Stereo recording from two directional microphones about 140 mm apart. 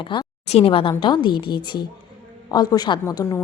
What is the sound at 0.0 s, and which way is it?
A woman's voice, 35° left (ahead or behind).